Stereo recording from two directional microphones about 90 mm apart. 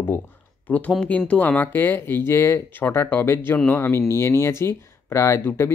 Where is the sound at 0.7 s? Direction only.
15° left (ahead or behind).